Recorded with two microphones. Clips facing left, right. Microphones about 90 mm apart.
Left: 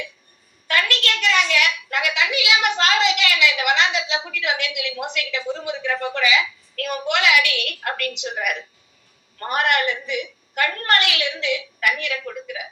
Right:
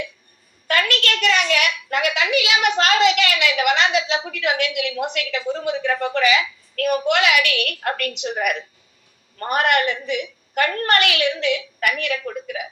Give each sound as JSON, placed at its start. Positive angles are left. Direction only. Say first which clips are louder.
{"t": 0.7, "sound": "a woman's voice", "louder": "right 2 dB", "side_deg": -45}